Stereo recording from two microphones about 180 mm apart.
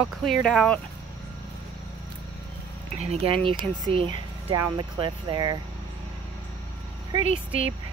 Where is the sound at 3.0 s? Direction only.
35° right (ahead or behind).